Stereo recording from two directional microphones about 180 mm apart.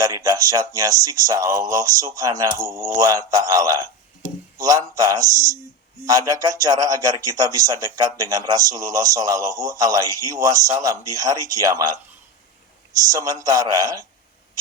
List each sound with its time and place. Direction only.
0.0 s speech: 20° right (ahead or behind)
13.1 s speech: 20° right (ahead or behind)